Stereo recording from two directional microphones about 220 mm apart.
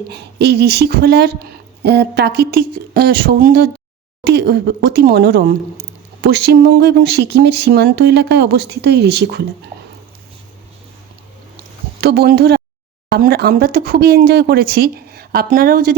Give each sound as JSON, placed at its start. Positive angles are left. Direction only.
{"t": 0.1, "sound": "speech", "side_deg": -50}
{"t": 11.9, "sound": "speech", "side_deg": -45}